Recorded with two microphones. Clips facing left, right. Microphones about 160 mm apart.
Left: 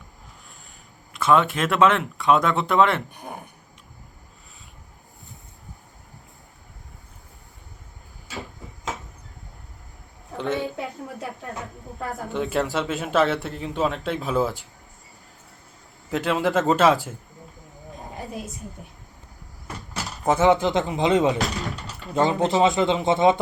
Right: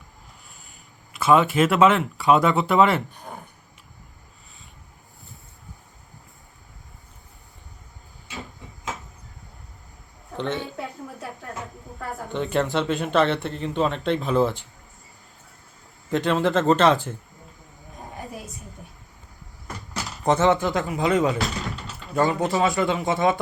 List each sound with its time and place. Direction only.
1.1 s speech: 5° right (ahead or behind)
3.1 s a sound: 15° left (ahead or behind)
10.3 s a sound: 5° left (ahead or behind)
12.3 s speech: centre (ahead or behind)
16.1 s speech: 5° left (ahead or behind)
20.2 s speech: 5° left (ahead or behind)
20.5 s speech: 20° left (ahead or behind)
21.4 s a sound: centre (ahead or behind)
22.1 s speech: 20° left (ahead or behind)